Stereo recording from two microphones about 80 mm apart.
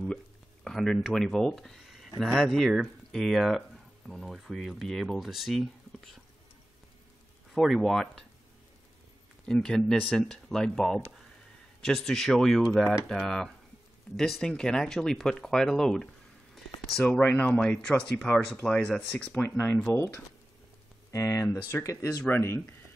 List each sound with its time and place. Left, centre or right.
0.7 s speech: centre
7.5 s speech: centre
9.5 s speech: centre
16.5 s a sound: centre
17.0 s speech: centre
19.4 s speech: left
21.1 s speech: left